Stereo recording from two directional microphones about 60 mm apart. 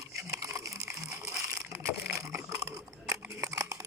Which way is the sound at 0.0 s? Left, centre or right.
Right.